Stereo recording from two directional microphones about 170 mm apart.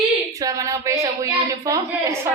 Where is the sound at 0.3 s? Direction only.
20° right (ahead or behind).